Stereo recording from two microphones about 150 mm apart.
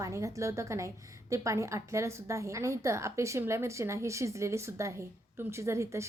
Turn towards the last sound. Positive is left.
turn(degrees=-20)  # may be behind; listen again after turning